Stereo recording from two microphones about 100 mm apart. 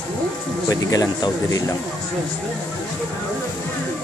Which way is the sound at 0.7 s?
35° left (ahead or behind).